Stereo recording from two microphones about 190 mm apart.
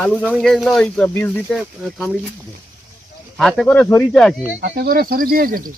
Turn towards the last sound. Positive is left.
turn(degrees=-50)  # may be behind; listen again after turning